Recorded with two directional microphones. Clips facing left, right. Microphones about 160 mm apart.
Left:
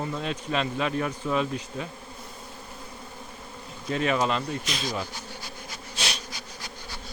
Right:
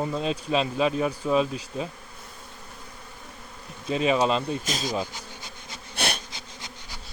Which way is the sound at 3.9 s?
20° right (ahead or behind).